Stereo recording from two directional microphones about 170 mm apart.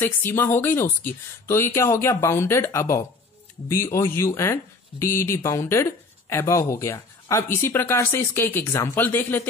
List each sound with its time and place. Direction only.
0.0 s speech: 15° left (ahead or behind)